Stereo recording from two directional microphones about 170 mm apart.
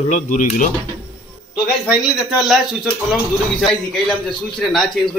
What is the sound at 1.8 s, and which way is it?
A man's voice, centre (ahead or behind).